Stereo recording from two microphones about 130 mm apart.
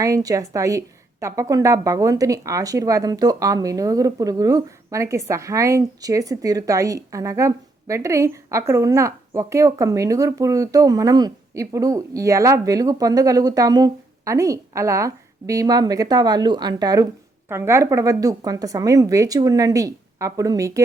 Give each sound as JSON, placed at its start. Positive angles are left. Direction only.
{"t": 0.0, "sound": "a woman's voice", "side_deg": -25}